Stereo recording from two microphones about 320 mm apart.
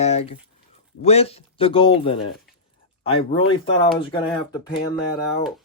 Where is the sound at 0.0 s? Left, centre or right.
Centre.